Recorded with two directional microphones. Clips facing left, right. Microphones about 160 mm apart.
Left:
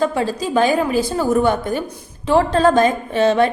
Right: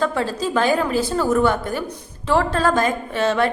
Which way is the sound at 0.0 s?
15° left (ahead or behind).